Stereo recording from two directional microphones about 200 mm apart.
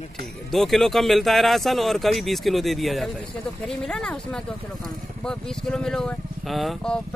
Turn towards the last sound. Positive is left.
turn(degrees=0)  # may be behind; listen again after turning